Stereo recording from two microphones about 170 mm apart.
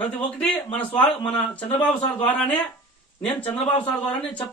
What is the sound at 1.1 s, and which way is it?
Speech, 25° left (ahead or behind).